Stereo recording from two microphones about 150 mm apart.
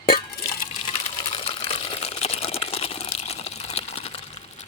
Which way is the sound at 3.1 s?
45° left (ahead or behind).